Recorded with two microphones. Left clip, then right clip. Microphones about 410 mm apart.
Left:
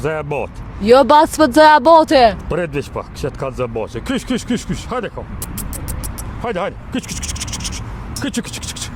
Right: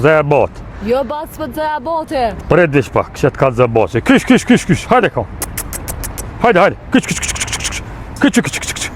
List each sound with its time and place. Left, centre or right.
0.0 s speech: right
0.9 s speech: left
2.5 s speech: right
6.4 s scratch: right
8.2 s speech: right